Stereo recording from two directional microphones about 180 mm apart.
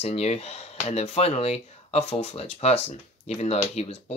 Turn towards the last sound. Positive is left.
turn(degrees=35)  # may be behind; listen again after turning